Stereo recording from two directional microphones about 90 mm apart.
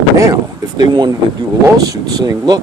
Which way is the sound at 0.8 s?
55° right (ahead or behind).